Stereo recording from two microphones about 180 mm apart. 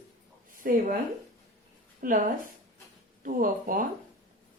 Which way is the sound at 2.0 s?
50° right (ahead or behind).